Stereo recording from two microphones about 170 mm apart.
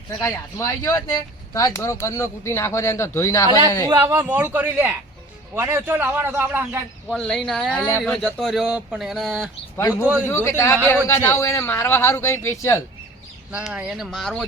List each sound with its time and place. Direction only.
0.2 s speech: 15° left (ahead or behind)
3.8 s a man's voice: 15° right (ahead or behind)
7.1 s a man's voice: 5° left (ahead or behind)
10.2 s speech: 15° left (ahead or behind)
13.5 s speech: 5° right (ahead or behind)